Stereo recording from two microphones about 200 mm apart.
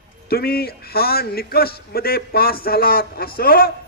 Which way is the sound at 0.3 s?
50° left (ahead or behind).